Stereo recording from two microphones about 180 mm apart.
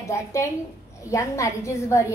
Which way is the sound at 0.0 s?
15° left (ahead or behind).